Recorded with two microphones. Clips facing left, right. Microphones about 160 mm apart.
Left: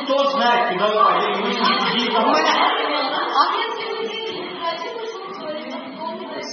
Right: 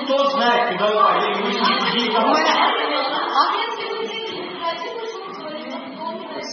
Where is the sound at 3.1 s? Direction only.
Centre (ahead or behind).